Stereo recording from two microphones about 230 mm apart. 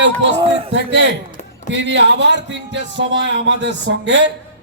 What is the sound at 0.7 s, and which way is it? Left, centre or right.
Speech, right.